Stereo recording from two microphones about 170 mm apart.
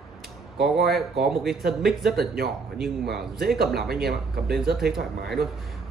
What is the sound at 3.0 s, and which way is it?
Speech, 75° right (ahead or behind).